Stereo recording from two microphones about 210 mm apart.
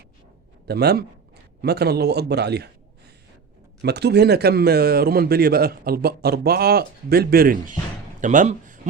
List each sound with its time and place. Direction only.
0.7 s speech: 50° right (ahead or behind)
3.8 s speech: 50° right (ahead or behind)